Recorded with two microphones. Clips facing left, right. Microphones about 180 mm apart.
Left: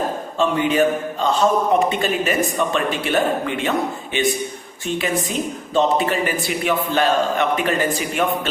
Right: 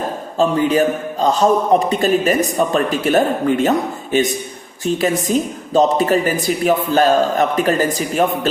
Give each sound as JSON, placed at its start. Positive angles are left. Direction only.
{"t": 0.3, "sound": "speech", "side_deg": -35}